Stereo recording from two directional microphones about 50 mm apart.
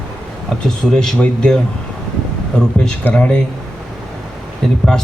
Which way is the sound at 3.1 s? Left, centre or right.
Left.